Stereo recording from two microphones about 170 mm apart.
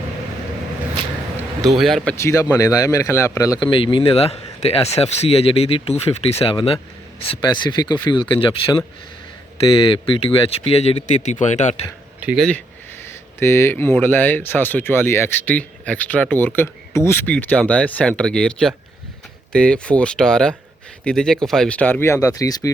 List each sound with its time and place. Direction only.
1.6 s speech: centre (ahead or behind)
2.1 s speech: 20° left (ahead or behind)
3.7 s speech: 30° left (ahead or behind)
12.2 s speech: 5° right (ahead or behind)
13.1 s speech: 15° left (ahead or behind)